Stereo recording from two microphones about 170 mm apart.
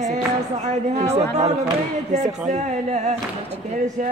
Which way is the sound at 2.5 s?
40° right (ahead or behind).